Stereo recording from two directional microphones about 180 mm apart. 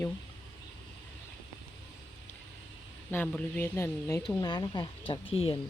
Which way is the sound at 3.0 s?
10° left (ahead or behind).